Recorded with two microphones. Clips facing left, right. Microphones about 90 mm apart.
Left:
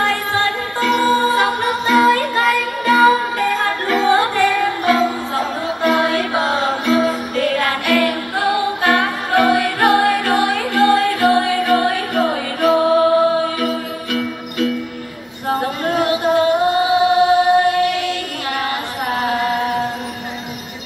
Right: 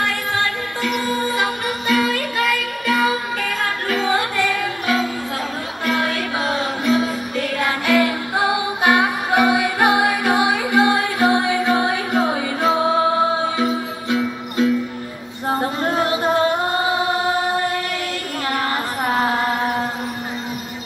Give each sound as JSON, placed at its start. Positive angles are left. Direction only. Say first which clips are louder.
{"t": 1.3, "sound": "music", "louder": "left 5 dB", "side_deg": 40}
{"t": 5.9, "sound": "music", "louder": "left 5 dB", "side_deg": 35}
{"t": 7.0, "sound": "music", "louder": "left 4 dB", "side_deg": 55}
{"t": 7.6, "sound": "music", "louder": "left 1 dB", "side_deg": -20}